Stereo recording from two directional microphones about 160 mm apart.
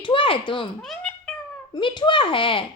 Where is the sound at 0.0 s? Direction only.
30° left (ahead or behind).